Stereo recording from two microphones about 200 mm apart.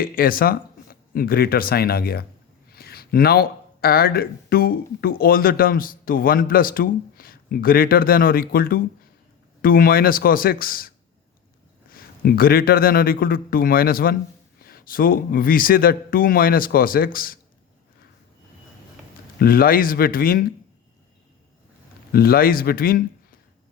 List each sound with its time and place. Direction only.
0.0 s speech: 45° left (ahead or behind)
19.4 s speech: 45° left (ahead or behind)
22.1 s speech: 50° left (ahead or behind)